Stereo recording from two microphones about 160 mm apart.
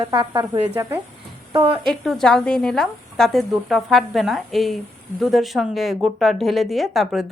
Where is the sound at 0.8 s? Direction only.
15° right (ahead or behind).